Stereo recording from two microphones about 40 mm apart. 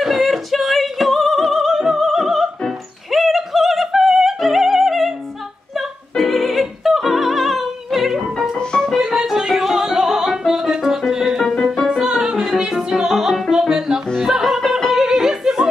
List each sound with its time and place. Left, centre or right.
0.0 s music: centre
3.1 s opera: centre
5.8 s music: centre
8.7 s music: centre
9.1 s music: centre
14.9 s a sound: centre